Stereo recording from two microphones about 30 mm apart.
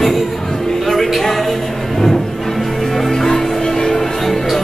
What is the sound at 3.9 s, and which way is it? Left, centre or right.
Music, centre.